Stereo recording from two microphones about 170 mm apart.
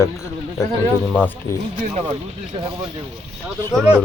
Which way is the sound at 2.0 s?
35° right (ahead or behind).